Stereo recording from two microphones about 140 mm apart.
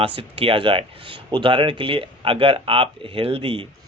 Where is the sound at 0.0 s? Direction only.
40° right (ahead or behind).